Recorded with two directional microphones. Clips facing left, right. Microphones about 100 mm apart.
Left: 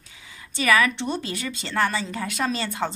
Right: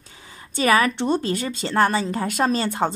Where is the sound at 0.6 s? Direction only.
40° right (ahead or behind).